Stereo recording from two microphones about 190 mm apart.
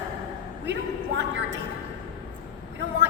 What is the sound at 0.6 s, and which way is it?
Speech, 65° right (ahead or behind).